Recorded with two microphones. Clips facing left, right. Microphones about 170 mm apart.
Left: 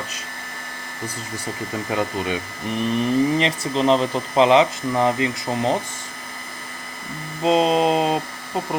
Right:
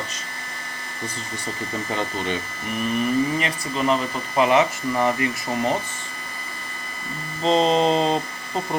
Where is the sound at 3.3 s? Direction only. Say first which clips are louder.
Left 4 dB; 25° left (ahead or behind).